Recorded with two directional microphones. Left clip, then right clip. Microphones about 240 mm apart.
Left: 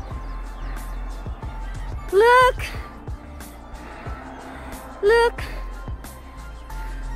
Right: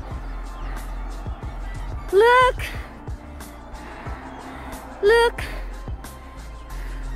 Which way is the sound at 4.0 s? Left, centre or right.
Centre.